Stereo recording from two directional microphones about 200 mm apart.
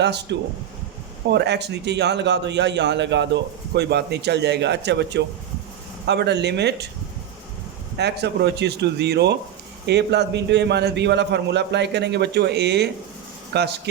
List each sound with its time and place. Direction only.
0.0 s a man's voice: 60° right (ahead or behind)
7.9 s a man's voice: 55° right (ahead or behind)